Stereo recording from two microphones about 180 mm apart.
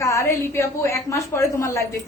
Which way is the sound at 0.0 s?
15° left (ahead or behind).